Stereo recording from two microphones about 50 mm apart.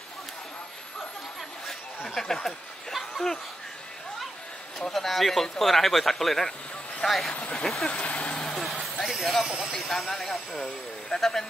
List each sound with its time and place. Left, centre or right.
2.1 s a sound: centre
4.7 s speech: centre
7.3 s speech: left
7.6 s speech: centre
7.9 s vehicle: left
8.5 s vehicle: centre
9.0 s a sound: centre
9.4 s speech: centre
9.8 s speech: centre